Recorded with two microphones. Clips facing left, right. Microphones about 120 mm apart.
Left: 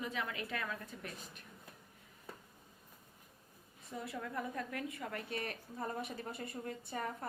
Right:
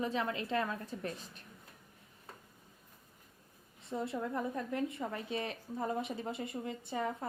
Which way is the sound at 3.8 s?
25° right (ahead or behind).